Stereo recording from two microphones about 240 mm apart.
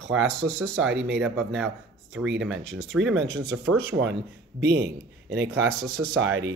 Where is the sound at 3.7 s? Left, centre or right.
Right.